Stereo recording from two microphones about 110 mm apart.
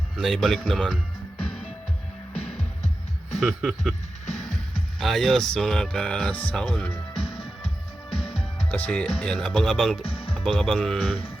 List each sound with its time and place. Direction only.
0.2 s speech: 5° left (ahead or behind)
3.3 s speech: 5° right (ahead or behind)
4.9 s speech: centre (ahead or behind)
7.1 s music: 60° left (ahead or behind)
8.7 s speech: 10° left (ahead or behind)
10.0 s music: 55° left (ahead or behind)
10.3 s speech: centre (ahead or behind)